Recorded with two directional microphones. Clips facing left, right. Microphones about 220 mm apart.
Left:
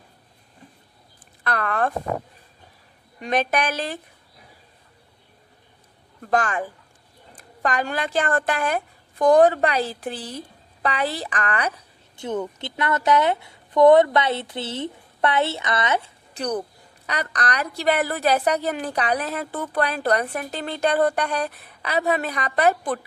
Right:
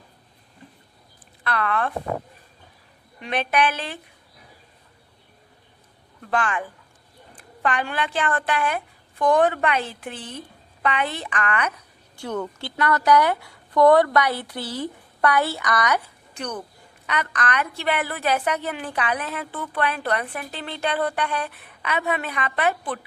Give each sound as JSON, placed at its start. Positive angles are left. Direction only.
{"t": 1.5, "sound": "speech", "side_deg": 45}
{"t": 3.2, "sound": "a woman's voice", "side_deg": 40}
{"t": 6.3, "sound": "a woman's voice", "side_deg": 40}
{"t": 12.1, "sound": "a woman's voice", "side_deg": 20}